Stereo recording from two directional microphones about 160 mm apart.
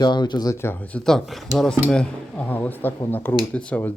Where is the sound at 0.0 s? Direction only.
30° left (ahead or behind).